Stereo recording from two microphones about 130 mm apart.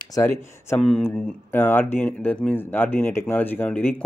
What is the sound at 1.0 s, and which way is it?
Speech, 15° left (ahead or behind).